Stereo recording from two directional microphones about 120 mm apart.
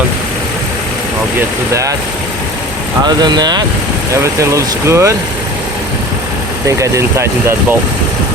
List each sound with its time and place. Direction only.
1.4 s speech: 25° right (ahead or behind)
3.0 s speech: 35° right (ahead or behind)
6.7 s speech: 25° right (ahead or behind)